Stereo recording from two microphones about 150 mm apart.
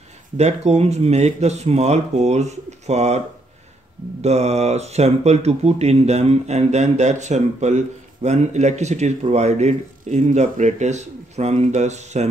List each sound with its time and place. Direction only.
0.4 s speech: 45° right (ahead or behind)
4.2 s speech: 45° right (ahead or behind)